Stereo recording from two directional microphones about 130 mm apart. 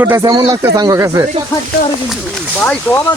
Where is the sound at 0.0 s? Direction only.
20° right (ahead or behind).